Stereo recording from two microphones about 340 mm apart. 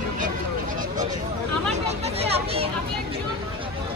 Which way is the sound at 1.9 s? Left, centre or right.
Centre.